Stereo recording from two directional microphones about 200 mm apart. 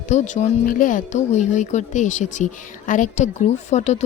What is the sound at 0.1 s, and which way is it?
A woman's voice, 40° left (ahead or behind).